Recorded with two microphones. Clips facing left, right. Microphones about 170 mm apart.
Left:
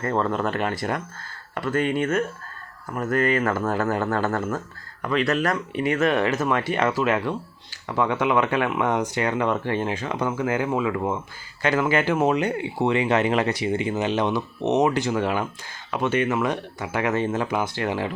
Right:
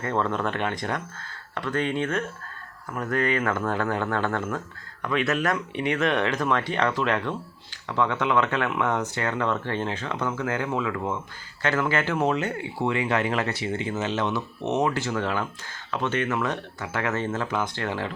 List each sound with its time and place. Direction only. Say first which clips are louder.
0.0 s speech: left 2 dB; centre (ahead or behind)